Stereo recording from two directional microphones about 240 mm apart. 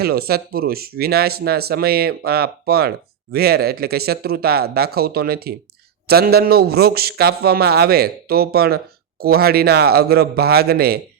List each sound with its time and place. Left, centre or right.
0.0 s a man's voice: right